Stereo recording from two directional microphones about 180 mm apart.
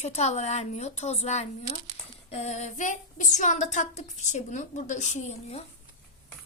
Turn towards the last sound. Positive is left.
turn(degrees=35)  # may be behind; listen again after turning